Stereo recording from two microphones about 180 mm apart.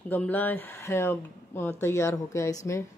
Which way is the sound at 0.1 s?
10° left (ahead or behind).